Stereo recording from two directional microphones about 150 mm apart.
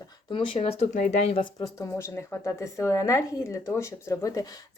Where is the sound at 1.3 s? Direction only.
35° left (ahead or behind).